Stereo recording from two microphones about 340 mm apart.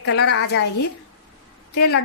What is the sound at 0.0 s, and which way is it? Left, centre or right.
Speech, left.